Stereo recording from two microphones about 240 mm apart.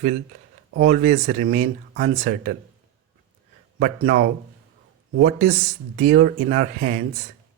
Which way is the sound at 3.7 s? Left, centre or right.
Right.